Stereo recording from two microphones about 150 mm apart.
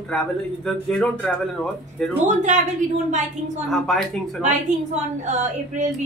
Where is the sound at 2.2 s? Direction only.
55° right (ahead or behind).